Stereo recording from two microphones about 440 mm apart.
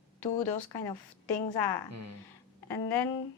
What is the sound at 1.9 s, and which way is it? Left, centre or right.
Speech, right.